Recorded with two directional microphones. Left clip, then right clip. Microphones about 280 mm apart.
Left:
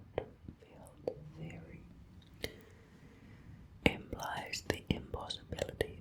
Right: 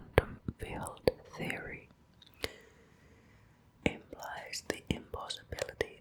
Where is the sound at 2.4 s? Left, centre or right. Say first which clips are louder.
Right 4 dB; centre.